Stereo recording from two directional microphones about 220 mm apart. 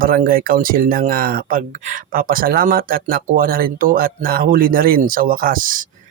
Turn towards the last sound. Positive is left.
turn(degrees=-40)  # may be behind; listen again after turning